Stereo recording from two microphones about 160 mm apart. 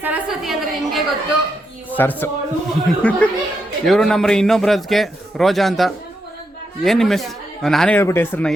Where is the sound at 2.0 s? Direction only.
15° left (ahead or behind).